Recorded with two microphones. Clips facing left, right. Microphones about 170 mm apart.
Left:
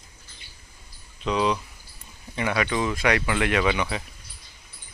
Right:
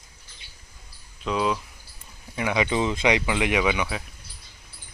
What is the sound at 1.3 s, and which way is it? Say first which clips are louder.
Speech: left 1 dB; 5° right (ahead or behind).